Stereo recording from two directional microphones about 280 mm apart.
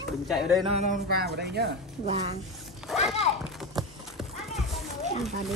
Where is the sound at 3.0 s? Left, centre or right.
Centre.